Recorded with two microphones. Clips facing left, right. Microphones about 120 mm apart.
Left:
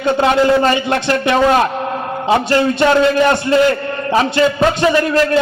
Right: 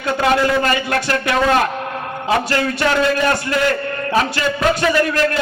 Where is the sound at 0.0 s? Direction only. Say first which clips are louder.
Left 4 dB; 25° left (ahead or behind).